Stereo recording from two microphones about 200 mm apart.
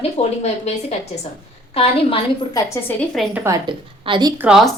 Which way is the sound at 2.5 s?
15° left (ahead or behind).